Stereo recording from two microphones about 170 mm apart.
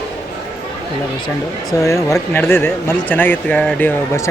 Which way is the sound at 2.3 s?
15° left (ahead or behind).